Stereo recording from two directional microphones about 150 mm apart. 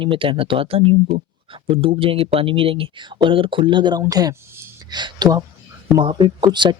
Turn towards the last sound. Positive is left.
turn(degrees=-30)  # may be behind; listen again after turning